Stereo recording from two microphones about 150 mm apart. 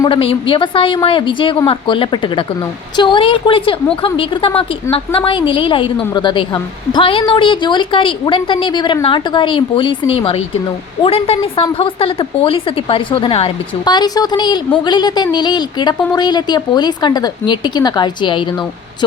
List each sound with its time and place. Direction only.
0.1 s a woman's voice: 35° left (ahead or behind)